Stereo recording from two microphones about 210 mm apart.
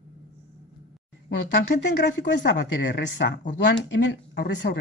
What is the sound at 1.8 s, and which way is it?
Speech, 55° left (ahead or behind).